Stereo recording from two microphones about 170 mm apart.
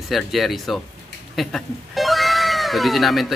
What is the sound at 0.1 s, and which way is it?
Speech, centre (ahead or behind).